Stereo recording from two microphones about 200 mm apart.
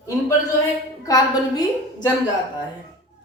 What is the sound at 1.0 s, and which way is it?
Speech, 20° left (ahead or behind).